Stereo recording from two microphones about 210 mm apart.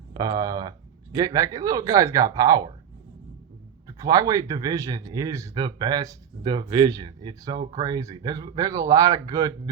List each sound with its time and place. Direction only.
0.1 s a man's voice: 20° right (ahead or behind)
3.8 s a man's voice: 15° right (ahead or behind)